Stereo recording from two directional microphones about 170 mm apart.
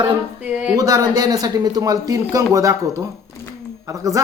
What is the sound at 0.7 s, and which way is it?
Speech, 20° right (ahead or behind).